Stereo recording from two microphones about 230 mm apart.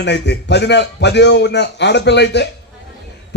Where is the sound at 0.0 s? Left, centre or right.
Left.